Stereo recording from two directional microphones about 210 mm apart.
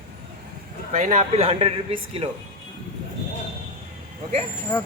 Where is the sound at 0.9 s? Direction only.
35° right (ahead or behind).